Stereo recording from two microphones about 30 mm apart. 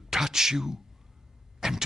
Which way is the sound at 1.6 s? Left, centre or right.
Centre.